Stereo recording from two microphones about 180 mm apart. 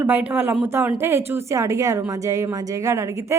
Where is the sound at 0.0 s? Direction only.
10° right (ahead or behind).